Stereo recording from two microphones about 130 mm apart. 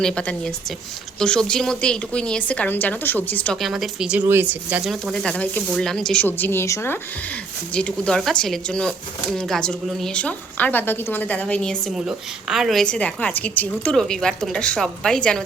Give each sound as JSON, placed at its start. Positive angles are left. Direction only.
{"t": 0.0, "sound": "a woman's voice", "side_deg": 5}
{"t": 3.6, "sound": "a woman's voice", "side_deg": 0}
{"t": 4.3, "sound": "speech", "side_deg": -15}
{"t": 4.9, "sound": "a woman's voice", "side_deg": 0}
{"t": 6.2, "sound": "a woman's voice", "side_deg": 15}